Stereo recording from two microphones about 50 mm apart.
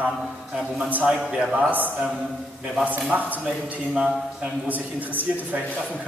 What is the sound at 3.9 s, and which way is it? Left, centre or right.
Speech, centre.